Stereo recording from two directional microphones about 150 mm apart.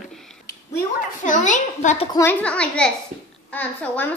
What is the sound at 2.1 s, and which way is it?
Speech, 20° left (ahead or behind).